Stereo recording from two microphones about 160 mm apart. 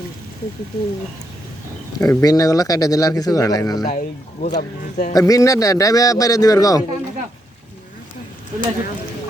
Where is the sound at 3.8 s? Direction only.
50° left (ahead or behind).